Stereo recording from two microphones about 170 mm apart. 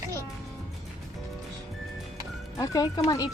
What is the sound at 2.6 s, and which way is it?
Speech, 20° left (ahead or behind).